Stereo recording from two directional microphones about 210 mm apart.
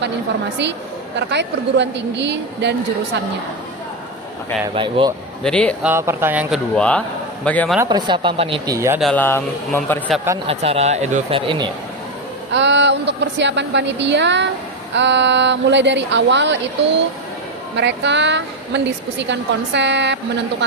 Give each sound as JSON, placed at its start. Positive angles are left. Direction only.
{"t": 1.1, "sound": "a woman's voice", "side_deg": -55}
{"t": 4.7, "sound": "speech", "side_deg": -25}
{"t": 5.4, "sound": "a man's voice", "side_deg": 5}
{"t": 5.9, "sound": "speech", "side_deg": -10}
{"t": 6.7, "sound": "a man's voice", "side_deg": 5}
{"t": 7.8, "sound": "speech", "side_deg": -20}
{"t": 9.0, "sound": "speech", "side_deg": 5}
{"t": 10.4, "sound": "speech", "side_deg": -30}
{"t": 12.5, "sound": "a woman's voice", "side_deg": -55}
{"t": 17.7, "sound": "a woman's voice", "side_deg": -55}